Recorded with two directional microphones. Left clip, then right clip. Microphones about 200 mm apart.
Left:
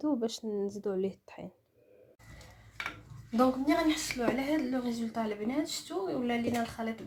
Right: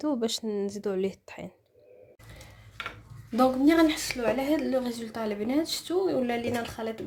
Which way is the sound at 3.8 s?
50° right (ahead or behind).